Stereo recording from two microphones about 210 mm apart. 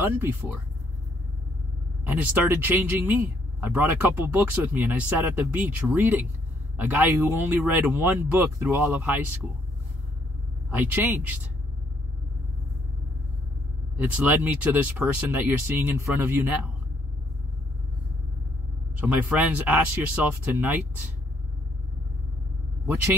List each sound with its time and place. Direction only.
0.0 s speech: 5° right (ahead or behind)
2.0 s speech: 10° right (ahead or behind)
10.7 s speech: 10° right (ahead or behind)
13.9 s speech: 10° right (ahead or behind)
18.9 s speech: 5° right (ahead or behind)